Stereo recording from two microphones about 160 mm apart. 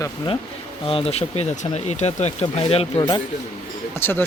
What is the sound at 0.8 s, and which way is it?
Speech, 35° left (ahead or behind).